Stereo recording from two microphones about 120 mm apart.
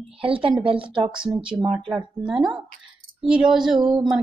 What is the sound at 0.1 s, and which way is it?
Speech, 50° right (ahead or behind).